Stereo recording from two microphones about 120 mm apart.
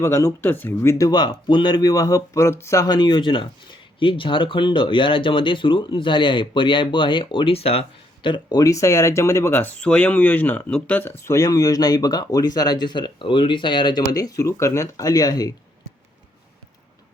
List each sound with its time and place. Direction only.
0.0 s speech: 25° left (ahead or behind)